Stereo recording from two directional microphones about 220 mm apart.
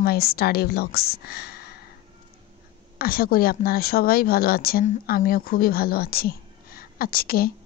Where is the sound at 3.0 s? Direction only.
40° left (ahead or behind).